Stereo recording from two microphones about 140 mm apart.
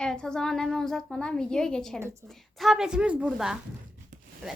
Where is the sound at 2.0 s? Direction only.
20° right (ahead or behind).